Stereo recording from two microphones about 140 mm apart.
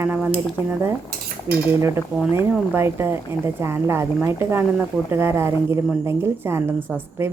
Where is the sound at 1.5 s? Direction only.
20° right (ahead or behind).